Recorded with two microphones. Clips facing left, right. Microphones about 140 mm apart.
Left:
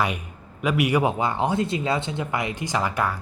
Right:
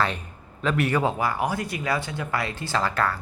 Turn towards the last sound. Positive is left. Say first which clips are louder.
# even
turn(degrees=15)  # may be behind; listen again after turning